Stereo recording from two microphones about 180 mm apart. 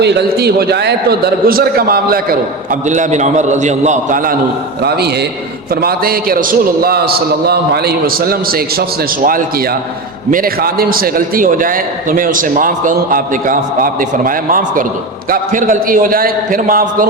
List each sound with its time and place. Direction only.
0.0 s a man's voice: 65° right (ahead or behind)
2.9 s a man's voice: 40° right (ahead or behind)
4.8 s a man's voice: 60° right (ahead or behind)
10.3 s a man's voice: 55° right (ahead or behind)